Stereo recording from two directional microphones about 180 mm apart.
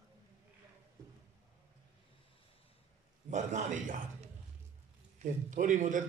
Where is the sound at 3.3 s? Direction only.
45° right (ahead or behind).